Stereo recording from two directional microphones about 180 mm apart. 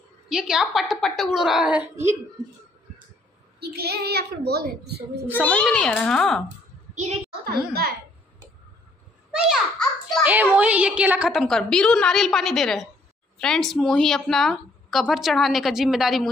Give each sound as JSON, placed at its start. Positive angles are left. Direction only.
{"t": 0.3, "sound": "a child's voice", "side_deg": -5}
{"t": 3.5, "sound": "a child's voice", "side_deg": -60}
{"t": 5.4, "sound": "a child's voice", "side_deg": 5}
{"t": 7.4, "sound": "a child's voice", "side_deg": -60}
{"t": 9.3, "sound": "a child's voice", "side_deg": -5}